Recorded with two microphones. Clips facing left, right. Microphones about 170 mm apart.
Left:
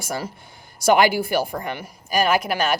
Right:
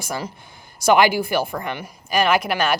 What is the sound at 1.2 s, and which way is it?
Speech, 40° left (ahead or behind).